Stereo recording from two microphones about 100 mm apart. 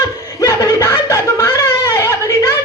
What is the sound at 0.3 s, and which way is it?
Snicker, 35° left (ahead or behind).